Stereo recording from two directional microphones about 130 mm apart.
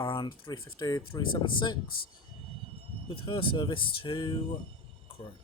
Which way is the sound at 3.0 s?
40° left (ahead or behind).